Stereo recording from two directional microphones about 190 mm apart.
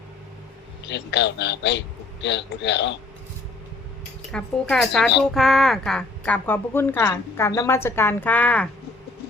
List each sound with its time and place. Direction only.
0.9 s a man's voice: 65° left (ahead or behind)
4.3 s a woman's voice: 5° left (ahead or behind)